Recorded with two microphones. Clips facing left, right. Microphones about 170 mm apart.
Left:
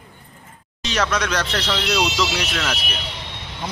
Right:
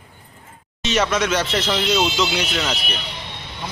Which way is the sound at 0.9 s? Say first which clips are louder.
Right 3 dB; centre (ahead or behind).